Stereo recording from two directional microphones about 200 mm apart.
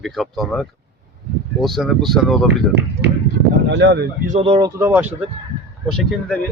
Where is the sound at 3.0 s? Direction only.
55° right (ahead or behind).